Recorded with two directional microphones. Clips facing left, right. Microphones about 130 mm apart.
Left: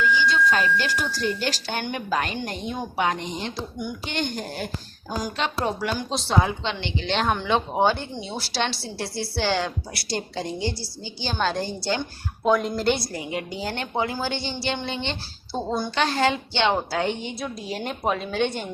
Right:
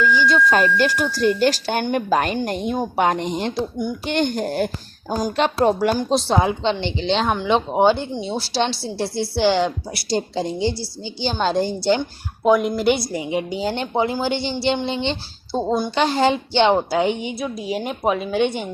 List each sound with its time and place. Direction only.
0.0 s speech: 45° right (ahead or behind)
6.3 s a woman's voice: 25° right (ahead or behind)
7.1 s speech: centre (ahead or behind)
7.3 s a woman's voice: 20° right (ahead or behind)
8.2 s a woman's voice: 30° right (ahead or behind)
12.5 s a woman's voice: 10° right (ahead or behind); by 16.7 s 30° right (ahead or behind)
16.7 s a woman's voice: 15° right (ahead or behind)